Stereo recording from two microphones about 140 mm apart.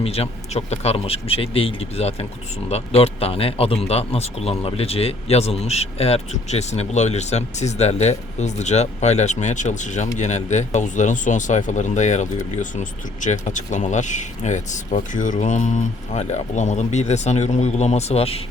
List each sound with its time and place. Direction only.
0.0 s speech: 45° left (ahead or behind)